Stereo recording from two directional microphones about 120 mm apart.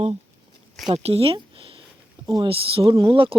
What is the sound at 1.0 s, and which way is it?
Speech, 55° right (ahead or behind).